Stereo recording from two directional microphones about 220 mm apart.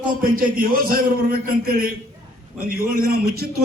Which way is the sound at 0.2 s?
40° right (ahead or behind).